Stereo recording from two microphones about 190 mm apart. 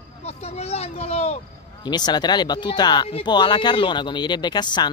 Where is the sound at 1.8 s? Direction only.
20° left (ahead or behind).